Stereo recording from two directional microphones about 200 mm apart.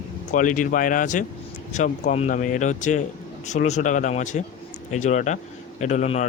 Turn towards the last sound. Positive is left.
turn(degrees=35)  # may be behind; listen again after turning